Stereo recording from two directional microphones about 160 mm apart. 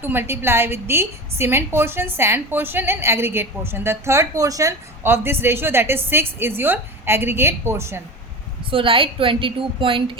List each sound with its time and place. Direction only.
0.0 s a woman's voice: 15° right (ahead or behind)
8.7 s a woman's voice: 35° right (ahead or behind)